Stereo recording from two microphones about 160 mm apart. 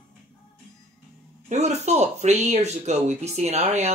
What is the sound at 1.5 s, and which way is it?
Speech, 45° right (ahead or behind).